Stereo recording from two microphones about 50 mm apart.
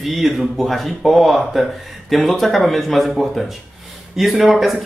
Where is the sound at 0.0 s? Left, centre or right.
Centre.